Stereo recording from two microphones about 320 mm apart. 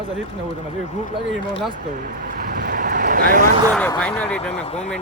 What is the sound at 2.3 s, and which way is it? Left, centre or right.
Vehicle, right.